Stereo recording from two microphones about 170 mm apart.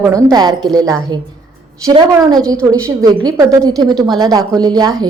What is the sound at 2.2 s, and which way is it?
A woman's voice, 20° right (ahead or behind).